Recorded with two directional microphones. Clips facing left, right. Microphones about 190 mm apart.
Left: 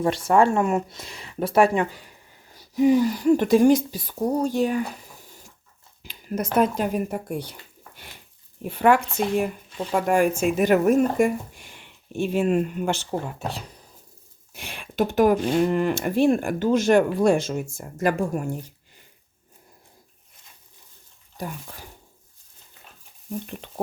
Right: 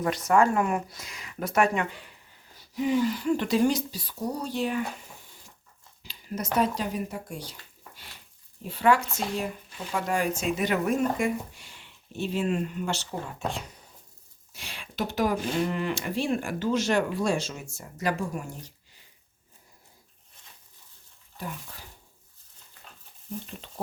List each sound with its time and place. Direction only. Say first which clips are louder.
0.0 s speech: left 4 dB; 30° left (ahead or behind); by 4.8 s 45° left (ahead or behind)
6.0 s speech: left 6 dB; 55° left (ahead or behind)
8.6 s speech: left 4 dB; 55° left (ahead or behind)
14.5 s speech: left 9 dB; 55° left (ahead or behind)
21.3 s speech: left 4 dB; 40° left (ahead or behind)
23.5 s speech: left 7 dB; 60° left (ahead or behind)